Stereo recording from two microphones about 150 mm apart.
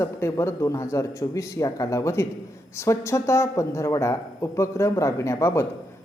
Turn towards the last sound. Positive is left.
turn(degrees=15)  # may be behind; listen again after turning